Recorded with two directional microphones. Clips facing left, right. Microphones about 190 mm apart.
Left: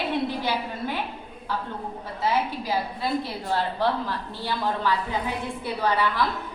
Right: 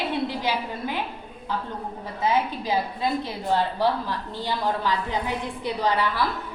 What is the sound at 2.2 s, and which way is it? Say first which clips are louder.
A woman's voice: right 1 dB; 20° right (ahead or behind).